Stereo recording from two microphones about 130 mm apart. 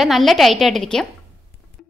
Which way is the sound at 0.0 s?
Centre (ahead or behind).